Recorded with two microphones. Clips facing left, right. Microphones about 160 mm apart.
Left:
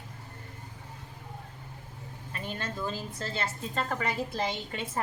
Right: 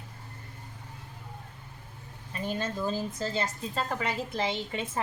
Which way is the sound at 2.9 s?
20° right (ahead or behind).